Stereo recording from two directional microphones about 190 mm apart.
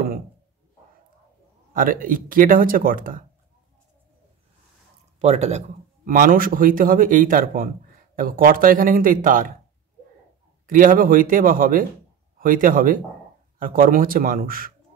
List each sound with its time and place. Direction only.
1.7 s speech: 45° right (ahead or behind)
5.2 s speech: 35° right (ahead or behind)
6.0 s speech: 45° right (ahead or behind)
10.7 s speech: 45° right (ahead or behind)